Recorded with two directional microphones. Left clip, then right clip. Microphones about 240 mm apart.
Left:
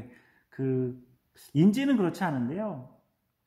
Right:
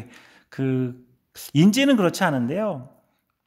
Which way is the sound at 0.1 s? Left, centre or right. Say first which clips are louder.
Right 9 dB; right.